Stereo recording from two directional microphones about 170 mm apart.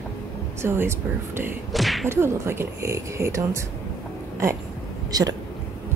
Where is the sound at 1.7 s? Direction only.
Centre (ahead or behind).